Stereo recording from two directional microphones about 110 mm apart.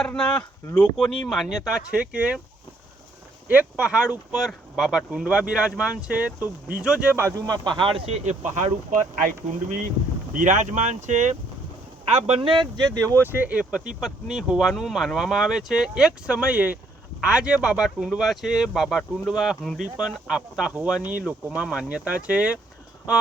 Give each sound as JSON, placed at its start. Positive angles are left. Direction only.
{"t": 0.0, "sound": "speech", "side_deg": 10}
{"t": 3.5, "sound": "speech", "side_deg": -15}
{"t": 7.2, "sound": "speech", "side_deg": -30}
{"t": 10.5, "sound": "speech", "side_deg": -90}
{"t": 12.0, "sound": "speech", "side_deg": -70}
{"t": 12.4, "sound": "speech", "side_deg": -50}
{"t": 13.2, "sound": "speech", "side_deg": -15}